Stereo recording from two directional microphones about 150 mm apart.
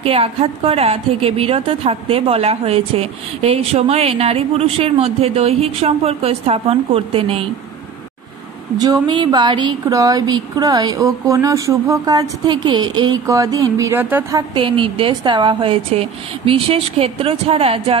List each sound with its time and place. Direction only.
0.0 s a woman's voice: 40° right (ahead or behind)
8.7 s speech: 25° right (ahead or behind)
14.5 s a woman's voice: 35° right (ahead or behind)